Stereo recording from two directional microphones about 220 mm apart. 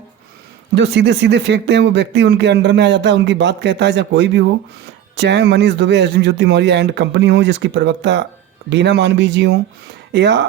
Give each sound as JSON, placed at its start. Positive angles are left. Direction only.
{"t": 0.8, "sound": "speech", "side_deg": -55}